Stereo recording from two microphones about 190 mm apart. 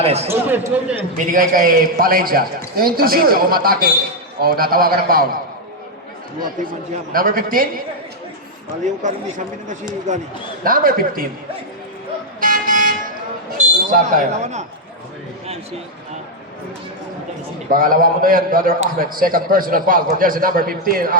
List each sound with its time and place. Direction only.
0.0 s speech: 35° right (ahead or behind)
0.3 s speech: 10° right (ahead or behind)
1.1 s a man's voice: 45° right (ahead or behind)
7.1 s a man's voice: 50° right (ahead or behind)
9.0 s speech: 40° right (ahead or behind)
10.6 s a man's voice: 50° right (ahead or behind)
12.4 s vehicle: 45° right (ahead or behind)
13.6 s a man's voice: 45° right (ahead or behind)
17.7 s a man's voice: 50° right (ahead or behind)